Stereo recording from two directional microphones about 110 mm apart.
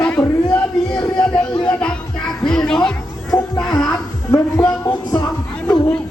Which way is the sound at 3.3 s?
30° left (ahead or behind).